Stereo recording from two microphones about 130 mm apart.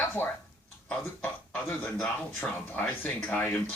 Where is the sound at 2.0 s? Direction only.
5° left (ahead or behind).